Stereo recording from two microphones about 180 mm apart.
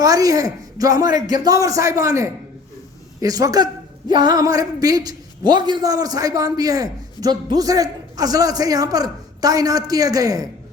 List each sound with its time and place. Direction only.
0.0 s a man's voice: 20° right (ahead or behind)